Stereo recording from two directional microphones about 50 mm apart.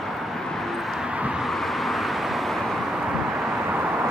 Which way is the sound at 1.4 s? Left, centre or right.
Centre.